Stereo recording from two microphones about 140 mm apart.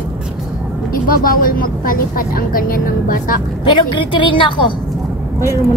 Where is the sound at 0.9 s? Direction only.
90° left.